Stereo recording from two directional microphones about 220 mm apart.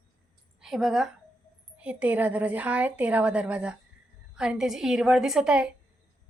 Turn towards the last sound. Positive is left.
turn(degrees=-5)  # may be behind; listen again after turning